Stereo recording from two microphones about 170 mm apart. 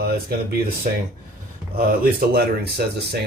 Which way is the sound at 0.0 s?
65° right (ahead or behind).